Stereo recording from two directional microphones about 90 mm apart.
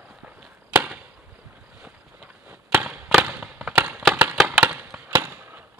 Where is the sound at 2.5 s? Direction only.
20° right (ahead or behind).